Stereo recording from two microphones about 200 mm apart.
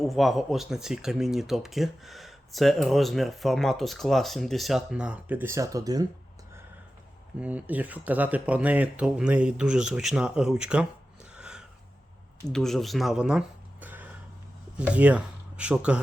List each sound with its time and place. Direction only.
0.1 s speech: centre (ahead or behind); by 6.1 s 20° right (ahead or behind)
7.3 s speech: 5° right (ahead or behind)
11.3 s a sound: 5° right (ahead or behind)
12.5 s speech: centre (ahead or behind)
13.8 s a sound: 10° right (ahead or behind)
14.8 s speech: 5° right (ahead or behind)